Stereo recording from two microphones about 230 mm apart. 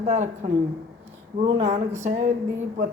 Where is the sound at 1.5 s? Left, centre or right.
Right.